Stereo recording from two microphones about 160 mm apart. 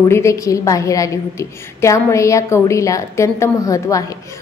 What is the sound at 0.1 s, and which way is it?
A woman's voice, 20° left (ahead or behind).